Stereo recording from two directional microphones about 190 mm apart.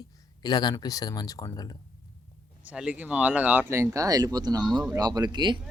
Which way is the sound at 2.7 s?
5° right (ahead or behind).